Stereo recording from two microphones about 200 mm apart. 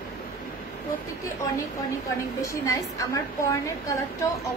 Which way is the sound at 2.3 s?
15° left (ahead or behind).